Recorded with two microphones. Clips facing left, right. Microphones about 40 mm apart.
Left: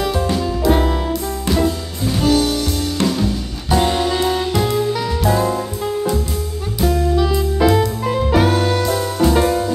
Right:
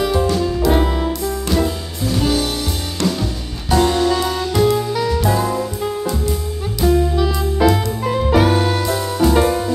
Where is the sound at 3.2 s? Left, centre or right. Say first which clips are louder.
Left 4 dB; centre.